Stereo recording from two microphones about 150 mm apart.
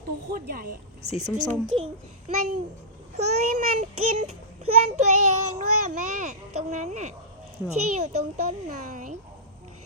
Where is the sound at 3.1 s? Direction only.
45° right (ahead or behind).